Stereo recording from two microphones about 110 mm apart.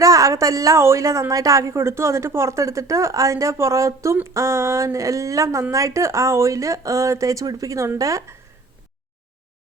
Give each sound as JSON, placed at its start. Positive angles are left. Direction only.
{"t": 0.0, "sound": "a woman's voice", "side_deg": -30}